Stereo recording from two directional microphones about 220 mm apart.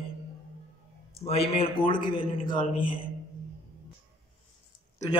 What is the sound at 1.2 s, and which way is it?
Speech, 30° left (ahead or behind).